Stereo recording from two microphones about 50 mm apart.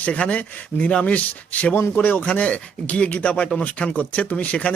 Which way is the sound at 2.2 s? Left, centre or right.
Left.